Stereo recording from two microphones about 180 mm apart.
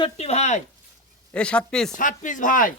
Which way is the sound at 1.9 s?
45° left (ahead or behind).